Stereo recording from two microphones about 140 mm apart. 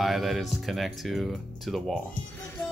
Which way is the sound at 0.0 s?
Centre (ahead or behind).